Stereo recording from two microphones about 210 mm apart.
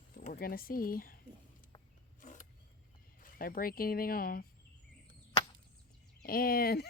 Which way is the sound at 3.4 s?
45° left (ahead or behind).